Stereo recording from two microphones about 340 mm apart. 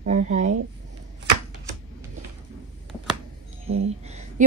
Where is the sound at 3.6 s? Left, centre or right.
Centre.